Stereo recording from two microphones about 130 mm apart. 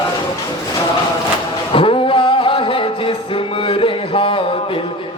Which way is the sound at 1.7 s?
40° left (ahead or behind).